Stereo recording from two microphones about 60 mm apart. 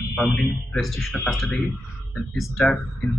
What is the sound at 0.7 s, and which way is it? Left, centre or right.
Speech, centre.